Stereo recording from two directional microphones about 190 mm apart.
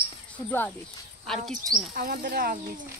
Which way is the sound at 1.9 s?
50° right (ahead or behind).